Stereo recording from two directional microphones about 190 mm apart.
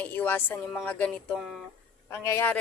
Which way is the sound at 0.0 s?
10° left (ahead or behind).